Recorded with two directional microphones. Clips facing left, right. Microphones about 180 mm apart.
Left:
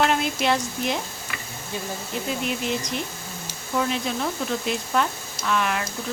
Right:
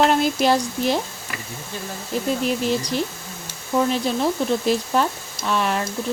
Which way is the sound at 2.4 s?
35° right (ahead or behind).